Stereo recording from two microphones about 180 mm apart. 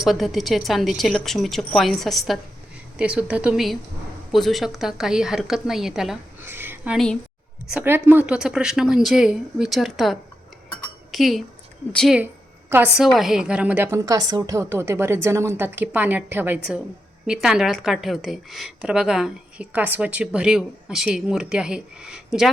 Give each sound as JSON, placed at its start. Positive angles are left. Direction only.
{"t": 0.0, "sound": "a woman's voice", "side_deg": 0}
{"t": 6.9, "sound": "a woman's voice", "side_deg": 5}
{"t": 7.7, "sound": "a woman's voice", "side_deg": -10}